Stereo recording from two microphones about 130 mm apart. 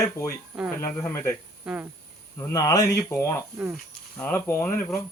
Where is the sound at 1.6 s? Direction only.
10° right (ahead or behind).